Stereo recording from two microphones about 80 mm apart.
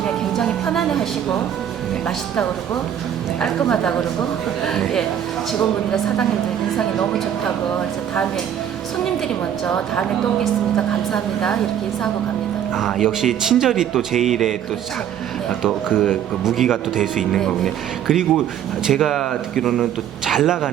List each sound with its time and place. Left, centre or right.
0.3 s a man's voice: centre
6.7 s speech: centre
9.6 s speech: centre
13.0 s a man's voice: centre
16.4 s a man's voice: centre
18.1 s a man's voice: centre